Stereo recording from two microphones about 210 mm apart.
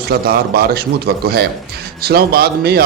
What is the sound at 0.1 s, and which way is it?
Speech, 45° right (ahead or behind).